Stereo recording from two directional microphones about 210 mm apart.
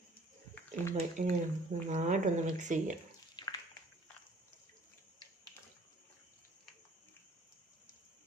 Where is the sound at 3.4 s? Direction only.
20° left (ahead or behind).